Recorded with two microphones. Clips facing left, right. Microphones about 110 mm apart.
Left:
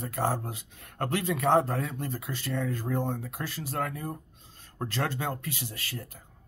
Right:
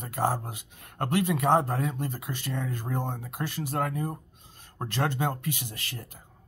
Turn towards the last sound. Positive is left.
turn(degrees=-25)  # may be behind; listen again after turning